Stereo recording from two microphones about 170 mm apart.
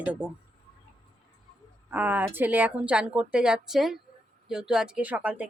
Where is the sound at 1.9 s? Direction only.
10° right (ahead or behind).